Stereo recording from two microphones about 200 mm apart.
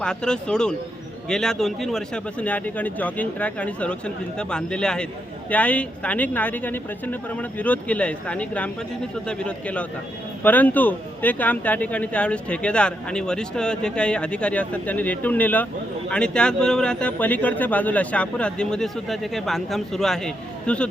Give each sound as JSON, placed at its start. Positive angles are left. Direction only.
{"t": 0.0, "sound": "speech", "side_deg": 5}